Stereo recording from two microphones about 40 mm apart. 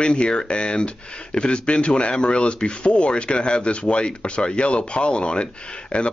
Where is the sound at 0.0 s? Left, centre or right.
Left.